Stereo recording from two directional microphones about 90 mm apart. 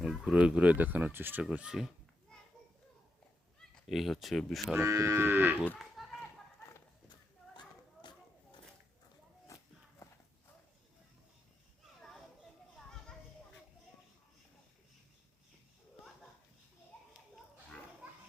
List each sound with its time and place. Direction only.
0.0 s speech: 10° right (ahead or behind)
1.5 s speech: 10° right (ahead or behind)
3.8 s speech: centre (ahead or behind)
4.8 s livestock: 35° right (ahead or behind)
6.0 s a sound: centre (ahead or behind)
8.0 s a sound: 60° left (ahead or behind)
10.0 s clip-clop: 35° left (ahead or behind)
18.0 s children playing: 10° right (ahead or behind)